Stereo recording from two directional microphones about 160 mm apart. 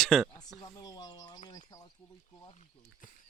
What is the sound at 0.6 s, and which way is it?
Speech, 25° left (ahead or behind).